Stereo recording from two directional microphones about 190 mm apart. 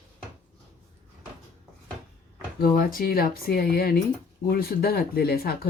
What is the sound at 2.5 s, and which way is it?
Speech, 50° left (ahead or behind).